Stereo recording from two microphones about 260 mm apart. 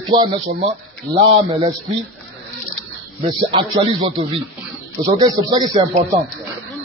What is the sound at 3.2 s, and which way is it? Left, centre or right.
Speech, centre.